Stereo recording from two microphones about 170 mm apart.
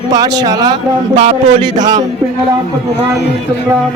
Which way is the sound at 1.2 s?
45° right (ahead or behind).